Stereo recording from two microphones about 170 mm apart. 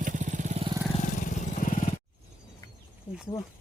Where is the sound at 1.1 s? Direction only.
50° left (ahead or behind).